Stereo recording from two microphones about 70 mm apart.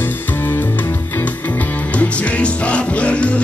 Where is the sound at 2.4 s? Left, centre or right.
Centre.